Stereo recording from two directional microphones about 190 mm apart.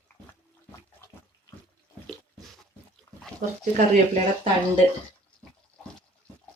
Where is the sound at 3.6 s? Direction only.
45° right (ahead or behind).